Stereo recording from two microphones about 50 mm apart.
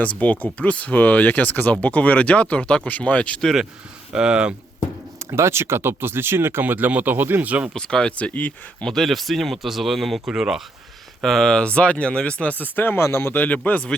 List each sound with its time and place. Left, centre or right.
0.0 s speech: left
4.1 s speech: centre
5.2 s speech: right
7.7 s speech: centre
8.1 s speech: left
9.0 s speech: centre
11.2 s speech: centre
11.6 s speech: left
13.0 s speech: left
13.3 s speech: left